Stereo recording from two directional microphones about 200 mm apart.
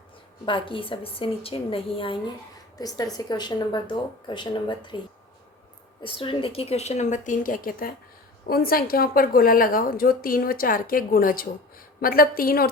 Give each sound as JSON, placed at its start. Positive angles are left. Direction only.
{"t": 0.4, "sound": "a woman's voice", "side_deg": 25}
{"t": 6.0, "sound": "a woman's voice", "side_deg": 25}